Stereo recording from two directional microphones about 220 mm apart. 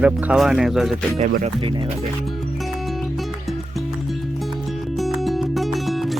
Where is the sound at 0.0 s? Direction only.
5° right (ahead or behind).